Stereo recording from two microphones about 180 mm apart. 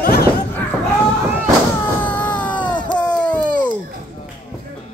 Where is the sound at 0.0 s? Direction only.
55° left (ahead or behind).